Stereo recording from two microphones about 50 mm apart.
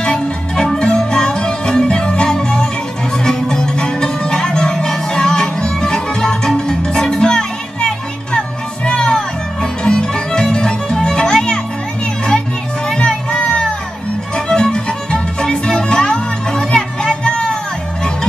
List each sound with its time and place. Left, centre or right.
0.0 s music: centre
12.8 s music: centre